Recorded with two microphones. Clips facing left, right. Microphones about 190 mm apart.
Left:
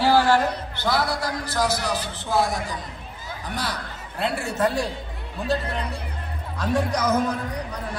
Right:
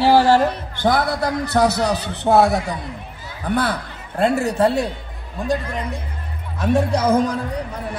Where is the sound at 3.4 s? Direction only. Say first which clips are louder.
Right 10 dB; 55° right (ahead or behind).